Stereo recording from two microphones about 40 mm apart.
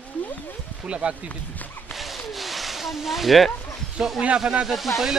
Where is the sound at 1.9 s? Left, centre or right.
Centre.